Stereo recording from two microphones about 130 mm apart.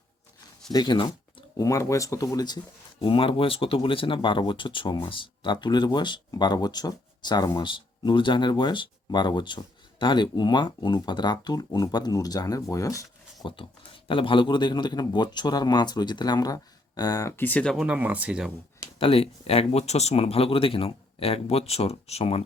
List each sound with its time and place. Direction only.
0.7 s speech: 35° left (ahead or behind)
3.0 s speech: 40° left (ahead or behind); by 13.5 s 25° left (ahead or behind)
14.1 s speech: 40° left (ahead or behind); by 17.7 s 10° left (ahead or behind)
17.7 s speech: 10° right (ahead or behind)
18.9 s speech: 45° left (ahead or behind)